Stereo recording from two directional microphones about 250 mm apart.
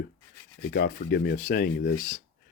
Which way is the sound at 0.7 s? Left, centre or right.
Left.